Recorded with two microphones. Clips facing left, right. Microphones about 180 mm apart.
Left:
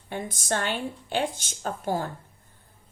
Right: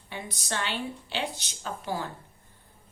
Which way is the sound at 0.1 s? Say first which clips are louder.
Left 6 dB; 50° left (ahead or behind).